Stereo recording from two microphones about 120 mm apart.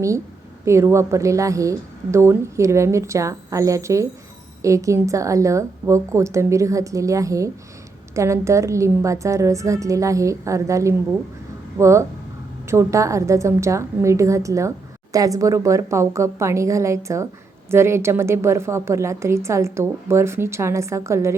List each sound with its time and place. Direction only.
0.6 s a woman's voice: 25° right (ahead or behind)